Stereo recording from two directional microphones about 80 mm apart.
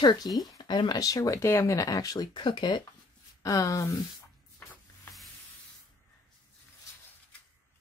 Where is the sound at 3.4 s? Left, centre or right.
Left.